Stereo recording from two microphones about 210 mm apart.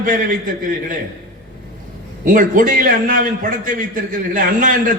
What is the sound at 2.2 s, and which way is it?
A man's voice, 40° right (ahead or behind).